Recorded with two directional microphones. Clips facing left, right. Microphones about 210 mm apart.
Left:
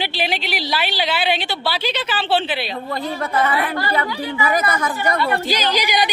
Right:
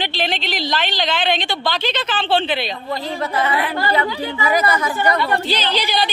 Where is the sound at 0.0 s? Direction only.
10° left (ahead or behind).